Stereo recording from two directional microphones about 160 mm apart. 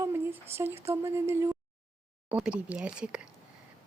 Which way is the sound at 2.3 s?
5° right (ahead or behind).